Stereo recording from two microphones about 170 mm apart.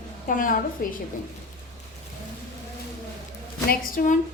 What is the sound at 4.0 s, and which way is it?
Speech, 55° left (ahead or behind).